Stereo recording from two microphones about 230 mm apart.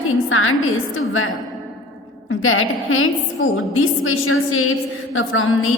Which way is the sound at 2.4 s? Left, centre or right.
Left.